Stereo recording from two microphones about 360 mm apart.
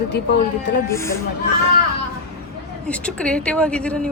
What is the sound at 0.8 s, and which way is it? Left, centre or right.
Speech, centre.